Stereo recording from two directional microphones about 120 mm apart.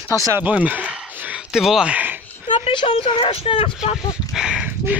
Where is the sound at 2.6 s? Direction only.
50° left (ahead or behind).